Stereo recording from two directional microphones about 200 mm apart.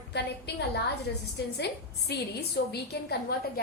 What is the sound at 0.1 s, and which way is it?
Speech, 55° left (ahead or behind).